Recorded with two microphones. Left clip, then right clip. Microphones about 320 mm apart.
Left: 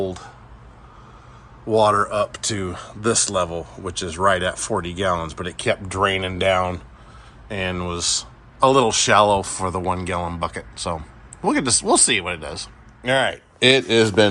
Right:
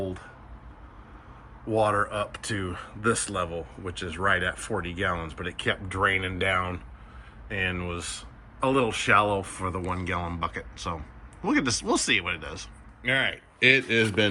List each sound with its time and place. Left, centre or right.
1.7 s speech: centre
7.4 s speech: centre